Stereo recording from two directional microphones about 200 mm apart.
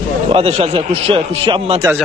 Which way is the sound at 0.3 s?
30° right (ahead or behind).